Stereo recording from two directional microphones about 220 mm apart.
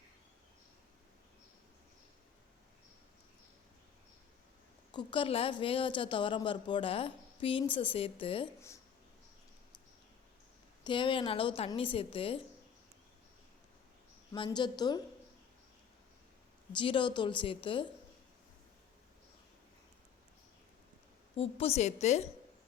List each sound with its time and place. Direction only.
4.9 s a woman's voice: 20° left (ahead or behind)
10.8 s a woman's voice: 20° left (ahead or behind)
14.3 s a woman's voice: 20° left (ahead or behind)
16.7 s a woman's voice: 20° left (ahead or behind)
21.3 s a woman's voice: 25° left (ahead or behind)